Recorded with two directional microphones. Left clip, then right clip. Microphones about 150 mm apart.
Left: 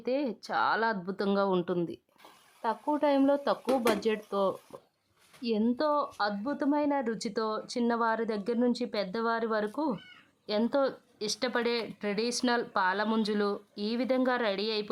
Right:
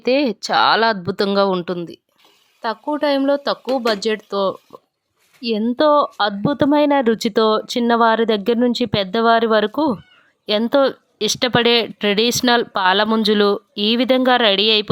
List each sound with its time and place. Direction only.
0.0 s speech: 35° right (ahead or behind)
2.6 s a woman's voice: 25° right (ahead or behind)